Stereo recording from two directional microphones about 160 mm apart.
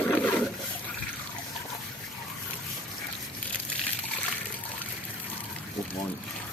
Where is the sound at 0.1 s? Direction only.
5° left (ahead or behind).